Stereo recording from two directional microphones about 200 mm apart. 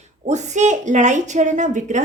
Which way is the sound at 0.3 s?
35° right (ahead or behind).